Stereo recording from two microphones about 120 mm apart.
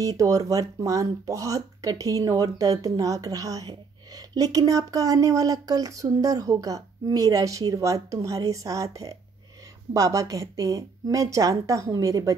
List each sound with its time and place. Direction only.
0.0 s speech: 30° right (ahead or behind)